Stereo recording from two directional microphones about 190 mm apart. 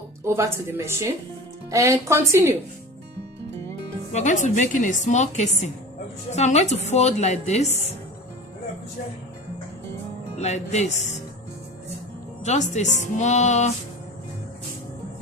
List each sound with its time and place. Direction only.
0.3 s speech: 15° right (ahead or behind)
4.1 s a woman's voice: 40° left (ahead or behind)
10.3 s a woman's voice: 35° left (ahead or behind)
12.5 s a woman's voice: 40° left (ahead or behind)